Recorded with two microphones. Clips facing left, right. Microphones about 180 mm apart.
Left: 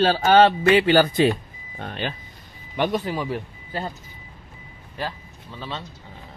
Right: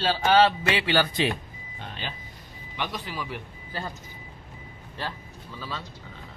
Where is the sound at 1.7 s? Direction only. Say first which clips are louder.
Left 8 dB; 55° left (ahead or behind).